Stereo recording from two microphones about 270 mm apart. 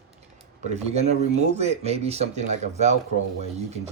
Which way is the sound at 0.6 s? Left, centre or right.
Right.